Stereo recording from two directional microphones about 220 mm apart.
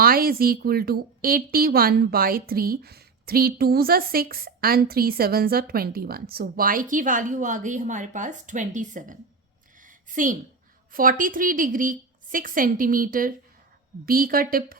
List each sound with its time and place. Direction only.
0.0 s speech: 40° right (ahead or behind)
9.7 s a sound: 35° right (ahead or behind)
10.9 s a woman's voice: 40° right (ahead or behind)